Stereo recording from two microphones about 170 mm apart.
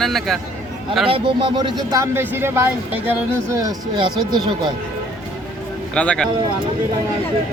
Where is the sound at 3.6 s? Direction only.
25° right (ahead or behind).